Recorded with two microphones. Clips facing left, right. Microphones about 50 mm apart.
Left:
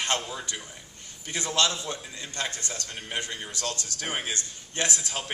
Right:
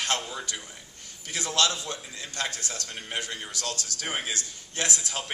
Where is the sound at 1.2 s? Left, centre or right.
Left.